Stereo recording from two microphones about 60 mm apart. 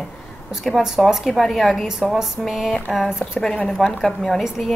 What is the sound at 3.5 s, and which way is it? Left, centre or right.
Speech, centre.